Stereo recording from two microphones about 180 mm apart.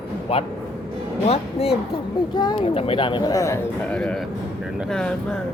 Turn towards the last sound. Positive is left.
turn(degrees=5)  # may be behind; listen again after turning